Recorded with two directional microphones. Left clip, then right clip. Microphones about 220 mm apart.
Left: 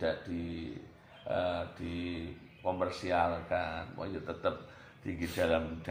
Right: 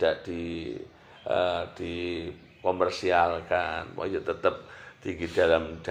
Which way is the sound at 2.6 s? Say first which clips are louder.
Right 8 dB; 35° right (ahead or behind).